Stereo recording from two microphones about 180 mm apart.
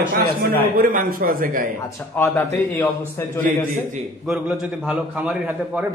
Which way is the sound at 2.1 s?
15° left (ahead or behind).